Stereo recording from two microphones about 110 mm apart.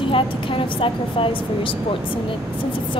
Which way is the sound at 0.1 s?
55° left (ahead or behind).